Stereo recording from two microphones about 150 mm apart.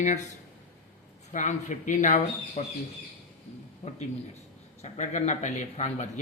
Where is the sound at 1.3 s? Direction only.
55° left (ahead or behind).